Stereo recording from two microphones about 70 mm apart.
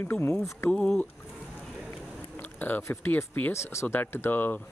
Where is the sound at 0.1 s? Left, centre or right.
Left.